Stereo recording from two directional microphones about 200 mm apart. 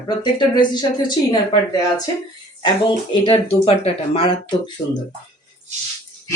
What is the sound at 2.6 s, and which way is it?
Speech, 20° left (ahead or behind).